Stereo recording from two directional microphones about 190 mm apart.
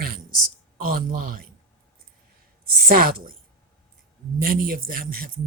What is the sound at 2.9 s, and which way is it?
Speech, 50° right (ahead or behind).